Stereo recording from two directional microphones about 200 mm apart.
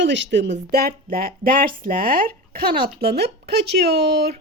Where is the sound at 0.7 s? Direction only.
50° right (ahead or behind).